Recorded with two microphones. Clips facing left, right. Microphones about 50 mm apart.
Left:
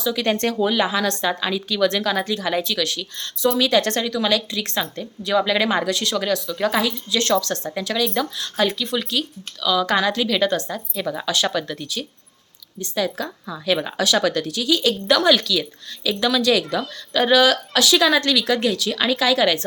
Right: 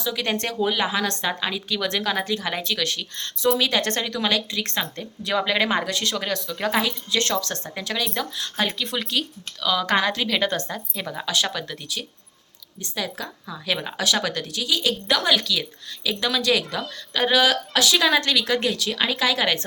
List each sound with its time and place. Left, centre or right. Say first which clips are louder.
0.0 s a woman's voice: left 5 dB; centre
2.6 s speech: left 2 dB; right
3.5 s speech: left 3 dB; centre; by 6.7 s right
6.7 s a woman's voice: left 1 dB; right
8.8 s speech: left 2 dB; right
11.0 s a woman's voice: left 3 dB; centre